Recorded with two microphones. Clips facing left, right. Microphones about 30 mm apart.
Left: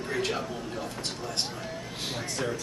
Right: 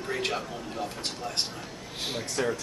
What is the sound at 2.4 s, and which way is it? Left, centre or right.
Speech, centre.